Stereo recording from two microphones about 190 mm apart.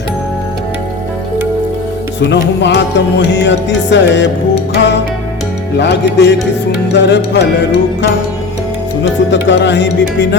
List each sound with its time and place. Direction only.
2.2 s music: 65° left (ahead or behind)
9.3 s music: 70° left (ahead or behind)